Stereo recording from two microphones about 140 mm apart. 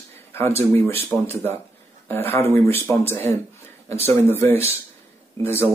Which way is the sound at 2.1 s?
15° left (ahead or behind).